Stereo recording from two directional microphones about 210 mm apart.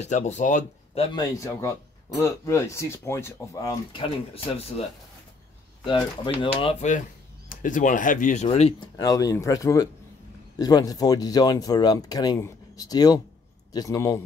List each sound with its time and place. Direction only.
0.0 s speech: 35° left (ahead or behind)
5.9 s speech: 20° left (ahead or behind)